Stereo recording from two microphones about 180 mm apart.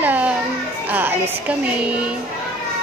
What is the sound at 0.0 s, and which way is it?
Children playing, 10° right (ahead or behind).